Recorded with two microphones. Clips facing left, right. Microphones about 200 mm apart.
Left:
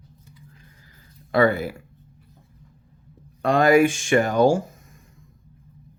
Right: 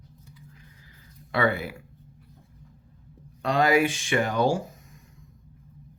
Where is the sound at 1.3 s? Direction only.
40° left (ahead or behind).